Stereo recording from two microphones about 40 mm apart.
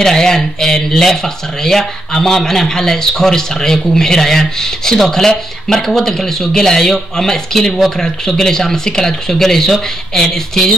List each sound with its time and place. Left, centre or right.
0.0 s speech: centre